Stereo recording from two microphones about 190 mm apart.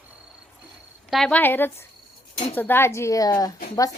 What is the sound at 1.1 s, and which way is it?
Speech, 5° left (ahead or behind).